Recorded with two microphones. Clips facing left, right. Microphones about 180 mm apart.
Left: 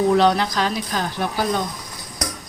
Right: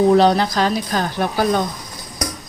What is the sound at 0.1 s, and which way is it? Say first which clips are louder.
Speech: right 3 dB; 35° right (ahead or behind).